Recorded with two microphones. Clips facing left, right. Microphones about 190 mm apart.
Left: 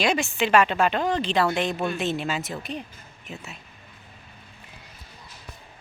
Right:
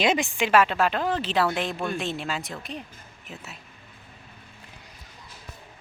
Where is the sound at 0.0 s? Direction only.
20° right (ahead or behind); by 3.6 s centre (ahead or behind).